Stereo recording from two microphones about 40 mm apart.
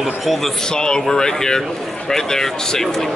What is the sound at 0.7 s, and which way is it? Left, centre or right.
Speech, centre.